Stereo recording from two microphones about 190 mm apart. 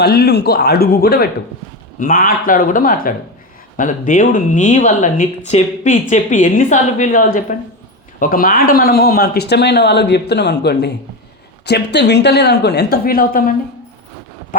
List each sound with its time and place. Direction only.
0.0 s speech: 55° left (ahead or behind)